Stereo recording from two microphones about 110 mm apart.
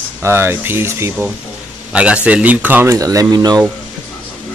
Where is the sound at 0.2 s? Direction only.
20° right (ahead or behind).